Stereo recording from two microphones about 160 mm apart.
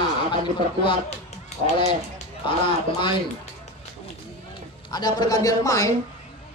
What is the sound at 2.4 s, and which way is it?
Speech, 30° left (ahead or behind).